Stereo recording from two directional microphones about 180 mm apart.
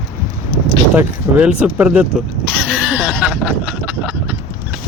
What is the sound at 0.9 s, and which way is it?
Speech, 10° right (ahead or behind).